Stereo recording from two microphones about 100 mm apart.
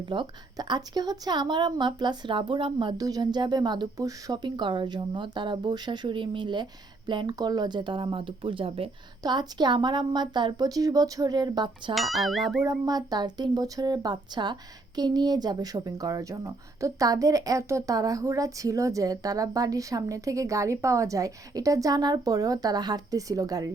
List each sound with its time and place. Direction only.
0.1 s speech: 50° right (ahead or behind)
3.0 s speech: 40° right (ahead or behind)
4.4 s speech: 50° right (ahead or behind); by 8.9 s 65° right (ahead or behind)
9.2 s speech: 45° right (ahead or behind)
11.9 s speech: centre (ahead or behind)
12.8 s speech: 40° right (ahead or behind)